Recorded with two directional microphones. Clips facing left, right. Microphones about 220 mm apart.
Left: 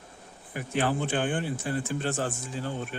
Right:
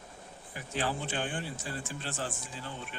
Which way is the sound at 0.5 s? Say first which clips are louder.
Left 7 dB; 55° left (ahead or behind).